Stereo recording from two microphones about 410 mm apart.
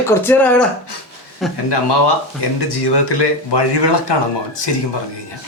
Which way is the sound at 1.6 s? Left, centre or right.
Left.